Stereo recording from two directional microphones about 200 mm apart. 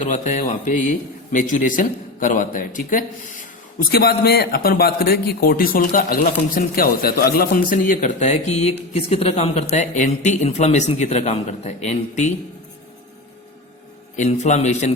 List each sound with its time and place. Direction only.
0.0 s a man's voice: 40° left (ahead or behind)
14.2 s speech: 35° left (ahead or behind)